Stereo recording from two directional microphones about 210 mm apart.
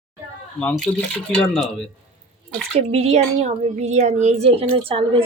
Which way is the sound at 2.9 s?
30° right (ahead or behind).